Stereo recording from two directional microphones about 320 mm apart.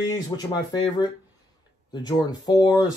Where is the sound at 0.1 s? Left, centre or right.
Centre.